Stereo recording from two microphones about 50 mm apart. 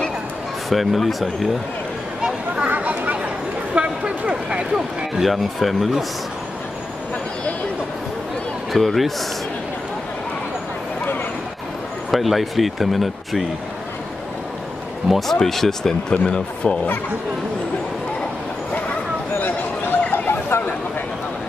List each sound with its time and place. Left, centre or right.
0.7 s speech: centre
2.2 s chatter: right
3.7 s a sound: centre
8.7 s speech: centre
12.1 s speech: centre
15.0 s speech: centre
19.3 s a sound: left